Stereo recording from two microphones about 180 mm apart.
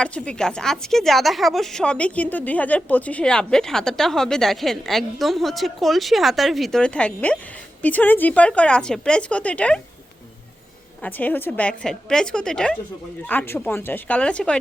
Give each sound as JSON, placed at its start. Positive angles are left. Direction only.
{"t": 0.0, "sound": "a woman's voice", "side_deg": 5}
{"t": 11.0, "sound": "a woman's voice", "side_deg": 10}